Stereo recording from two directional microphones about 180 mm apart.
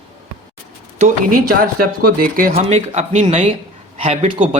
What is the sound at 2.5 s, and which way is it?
Speech, 35° right (ahead or behind).